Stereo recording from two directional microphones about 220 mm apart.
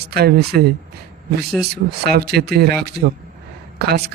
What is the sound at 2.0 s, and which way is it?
A man's voice, 45° right (ahead or behind).